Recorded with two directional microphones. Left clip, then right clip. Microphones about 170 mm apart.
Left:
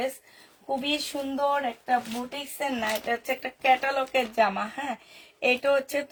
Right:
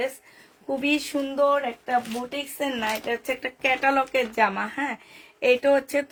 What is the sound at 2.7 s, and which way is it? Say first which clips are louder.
Speech: even; 50° right (ahead or behind).